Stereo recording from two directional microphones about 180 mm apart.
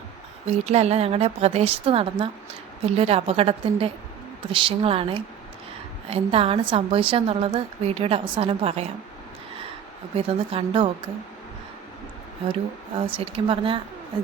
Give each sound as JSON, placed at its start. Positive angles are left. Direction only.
{"t": 0.4, "sound": "a woman's voice", "side_deg": -35}
{"t": 10.2, "sound": "a woman's voice", "side_deg": -30}
{"t": 13.1, "sound": "speech", "side_deg": -30}